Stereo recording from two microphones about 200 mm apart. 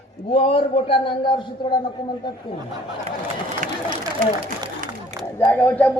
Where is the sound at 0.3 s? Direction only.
30° left (ahead or behind).